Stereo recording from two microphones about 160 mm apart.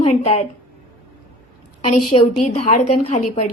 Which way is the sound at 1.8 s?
40° left (ahead or behind).